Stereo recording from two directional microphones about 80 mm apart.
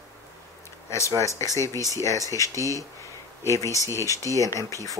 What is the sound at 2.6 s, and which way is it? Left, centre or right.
Speech, right.